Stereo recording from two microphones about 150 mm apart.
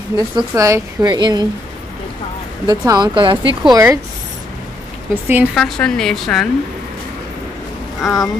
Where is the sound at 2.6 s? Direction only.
25° right (ahead or behind).